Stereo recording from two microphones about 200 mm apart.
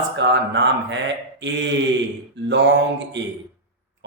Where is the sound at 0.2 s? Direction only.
65° right (ahead or behind).